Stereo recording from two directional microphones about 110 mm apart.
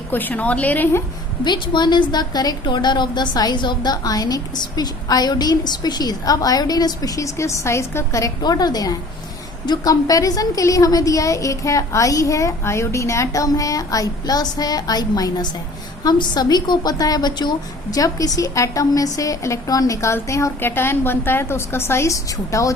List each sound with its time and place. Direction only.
0.1 s a woman's voice: 15° left (ahead or behind)
1.5 s a woman's voice: 45° left (ahead or behind)